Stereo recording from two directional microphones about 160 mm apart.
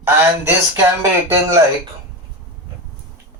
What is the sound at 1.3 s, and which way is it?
Speech, 20° right (ahead or behind).